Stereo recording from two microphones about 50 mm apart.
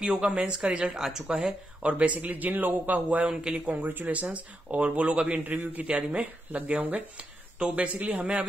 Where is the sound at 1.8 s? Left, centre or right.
Right.